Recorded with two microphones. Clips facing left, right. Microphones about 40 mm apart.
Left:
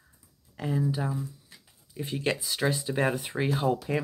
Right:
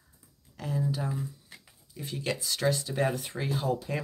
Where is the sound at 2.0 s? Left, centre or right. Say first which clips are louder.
Left 5 dB; left.